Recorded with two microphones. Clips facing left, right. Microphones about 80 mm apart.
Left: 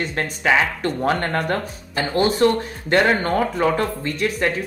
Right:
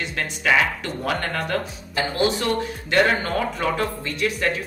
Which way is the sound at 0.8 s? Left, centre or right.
Left.